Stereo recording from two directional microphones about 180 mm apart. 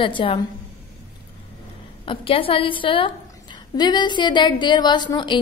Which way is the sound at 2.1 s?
30° left (ahead or behind).